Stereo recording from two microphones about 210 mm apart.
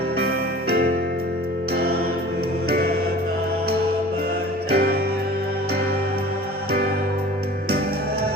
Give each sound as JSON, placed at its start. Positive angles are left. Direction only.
{"t": 0.2, "sound": "music", "side_deg": -50}
{"t": 4.7, "sound": "music", "side_deg": -50}